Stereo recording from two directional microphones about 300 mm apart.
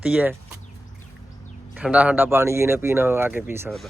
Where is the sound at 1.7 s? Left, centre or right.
Centre.